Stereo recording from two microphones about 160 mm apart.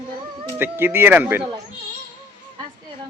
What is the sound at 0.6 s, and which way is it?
Speech, 15° right (ahead or behind).